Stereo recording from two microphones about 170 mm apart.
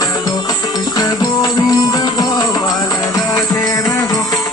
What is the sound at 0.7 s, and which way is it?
Music, 20° left (ahead or behind).